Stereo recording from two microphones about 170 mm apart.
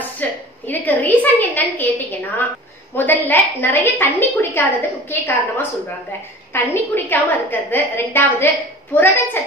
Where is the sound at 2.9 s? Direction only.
10° left (ahead or behind).